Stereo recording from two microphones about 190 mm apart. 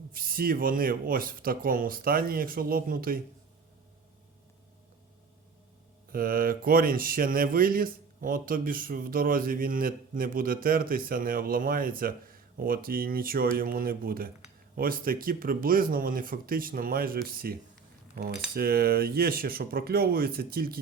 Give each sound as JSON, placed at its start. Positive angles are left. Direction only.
{"t": 0.1, "sound": "speech", "side_deg": -50}
{"t": 6.1, "sound": "speech", "side_deg": -50}